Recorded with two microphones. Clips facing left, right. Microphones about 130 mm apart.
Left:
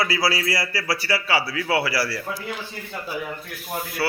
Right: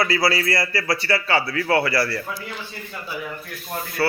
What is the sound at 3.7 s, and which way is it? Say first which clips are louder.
Speech: right 2 dB; 10° left (ahead or behind).